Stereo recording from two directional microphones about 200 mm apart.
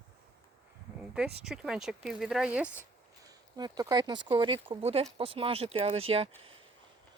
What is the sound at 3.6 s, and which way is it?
Speech, 20° right (ahead or behind).